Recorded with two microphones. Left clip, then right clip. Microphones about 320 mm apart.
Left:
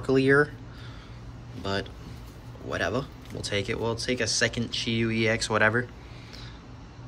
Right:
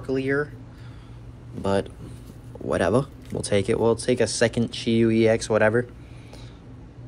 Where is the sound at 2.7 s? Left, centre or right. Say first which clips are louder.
Right 7 dB; centre.